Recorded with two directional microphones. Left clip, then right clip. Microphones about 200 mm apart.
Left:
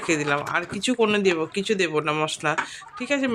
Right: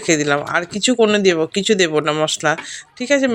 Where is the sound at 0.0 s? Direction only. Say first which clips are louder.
Right 6 dB; 25° right (ahead or behind).